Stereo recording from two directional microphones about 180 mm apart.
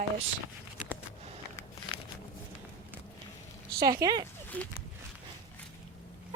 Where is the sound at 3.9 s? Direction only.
20° right (ahead or behind).